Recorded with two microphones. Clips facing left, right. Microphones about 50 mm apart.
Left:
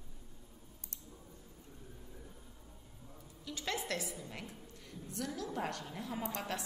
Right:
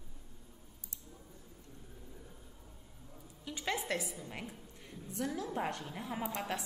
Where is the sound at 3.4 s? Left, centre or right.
Right.